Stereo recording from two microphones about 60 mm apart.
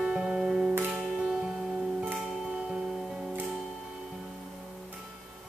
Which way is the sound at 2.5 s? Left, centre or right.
Centre.